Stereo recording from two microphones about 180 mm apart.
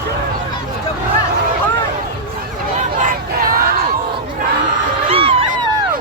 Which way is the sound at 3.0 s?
55° right (ahead or behind).